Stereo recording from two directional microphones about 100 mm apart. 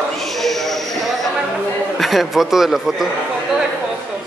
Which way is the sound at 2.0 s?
Centre (ahead or behind).